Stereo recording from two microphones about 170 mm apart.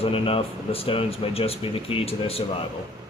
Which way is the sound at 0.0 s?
30° left (ahead or behind).